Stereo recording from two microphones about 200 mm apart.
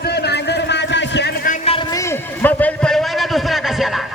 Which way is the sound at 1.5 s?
30° left (ahead or behind).